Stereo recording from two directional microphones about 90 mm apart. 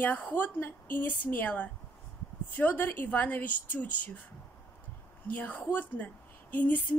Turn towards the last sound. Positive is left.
turn(degrees=15)  # may be behind; listen again after turning